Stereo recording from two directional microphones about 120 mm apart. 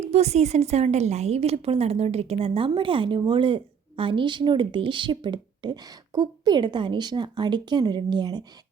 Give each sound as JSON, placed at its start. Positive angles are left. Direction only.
{"t": 0.0, "sound": "a woman's voice", "side_deg": -65}